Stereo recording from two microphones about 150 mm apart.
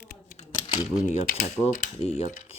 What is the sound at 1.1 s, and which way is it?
Speech, 65° left (ahead or behind).